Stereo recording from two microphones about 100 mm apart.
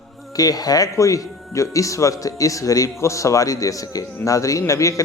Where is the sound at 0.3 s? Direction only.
40° left (ahead or behind).